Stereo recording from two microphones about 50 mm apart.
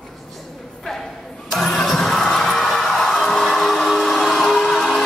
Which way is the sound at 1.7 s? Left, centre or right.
Centre.